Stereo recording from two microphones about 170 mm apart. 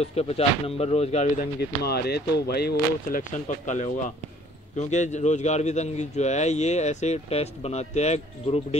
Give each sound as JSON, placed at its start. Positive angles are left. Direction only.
{"t": 0.0, "sound": "speech", "side_deg": 35}
{"t": 1.8, "sound": "speech", "side_deg": 70}
{"t": 3.2, "sound": "speech", "side_deg": 45}